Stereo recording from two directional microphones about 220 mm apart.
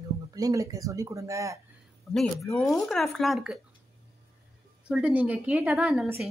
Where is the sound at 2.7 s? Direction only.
Centre (ahead or behind).